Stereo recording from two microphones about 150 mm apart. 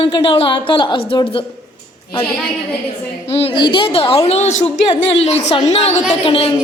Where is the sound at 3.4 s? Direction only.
35° left (ahead or behind).